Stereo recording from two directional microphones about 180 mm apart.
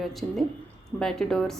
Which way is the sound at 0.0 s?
Centre (ahead or behind).